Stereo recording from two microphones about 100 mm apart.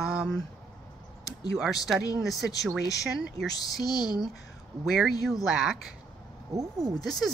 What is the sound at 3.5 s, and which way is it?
Speech, 40° left (ahead or behind).